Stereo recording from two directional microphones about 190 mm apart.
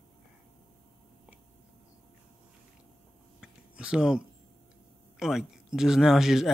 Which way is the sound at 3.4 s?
5° right (ahead or behind).